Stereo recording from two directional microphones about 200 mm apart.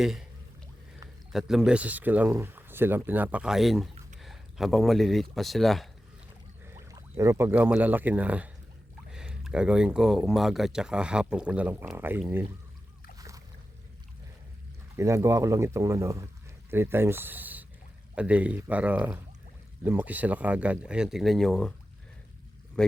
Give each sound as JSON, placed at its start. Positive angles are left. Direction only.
{"t": 0.0, "sound": "speech", "side_deg": 0}
{"t": 1.3, "sound": "speech", "side_deg": 0}
{"t": 6.7, "sound": "speech", "side_deg": -15}
{"t": 13.1, "sound": "boat", "side_deg": -15}
{"t": 14.9, "sound": "speech", "side_deg": -15}